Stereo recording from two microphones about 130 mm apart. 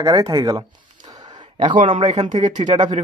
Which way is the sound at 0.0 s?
25° right (ahead or behind).